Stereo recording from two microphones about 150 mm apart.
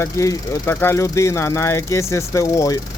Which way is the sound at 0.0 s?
20° left (ahead or behind).